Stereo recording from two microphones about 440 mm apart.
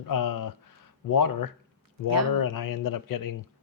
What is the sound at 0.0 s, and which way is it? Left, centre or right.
A man's voice, left.